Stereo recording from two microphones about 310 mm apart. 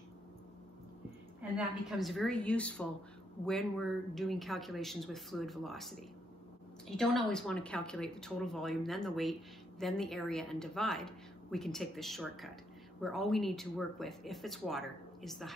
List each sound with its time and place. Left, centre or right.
1.6 s speech: centre